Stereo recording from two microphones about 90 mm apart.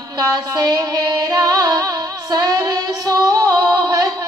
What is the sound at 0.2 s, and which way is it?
Music, 50° right (ahead or behind).